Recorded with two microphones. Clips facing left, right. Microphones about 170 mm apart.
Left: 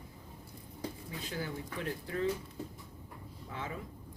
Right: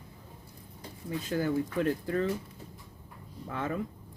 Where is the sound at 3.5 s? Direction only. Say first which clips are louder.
Right 8 dB; 55° right (ahead or behind).